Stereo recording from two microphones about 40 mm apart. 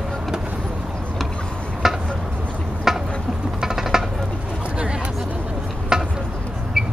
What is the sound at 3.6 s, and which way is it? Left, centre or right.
Music, centre.